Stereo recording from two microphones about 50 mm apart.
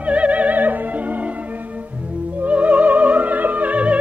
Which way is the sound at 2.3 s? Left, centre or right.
Right.